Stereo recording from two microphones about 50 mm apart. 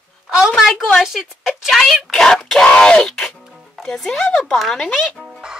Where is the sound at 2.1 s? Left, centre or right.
Centre.